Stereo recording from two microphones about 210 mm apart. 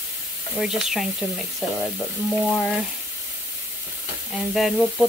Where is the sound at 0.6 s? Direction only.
Centre (ahead or behind).